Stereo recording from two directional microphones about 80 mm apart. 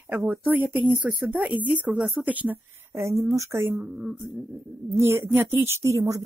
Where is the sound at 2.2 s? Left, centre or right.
Centre.